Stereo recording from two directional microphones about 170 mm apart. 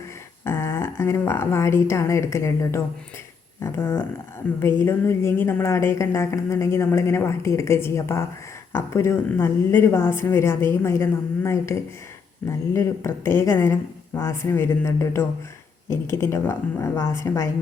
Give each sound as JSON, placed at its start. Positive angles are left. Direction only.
{"t": 0.4, "sound": "a woman's voice", "side_deg": 15}